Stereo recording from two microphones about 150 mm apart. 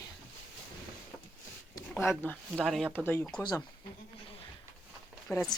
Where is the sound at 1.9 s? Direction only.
15° left (ahead or behind).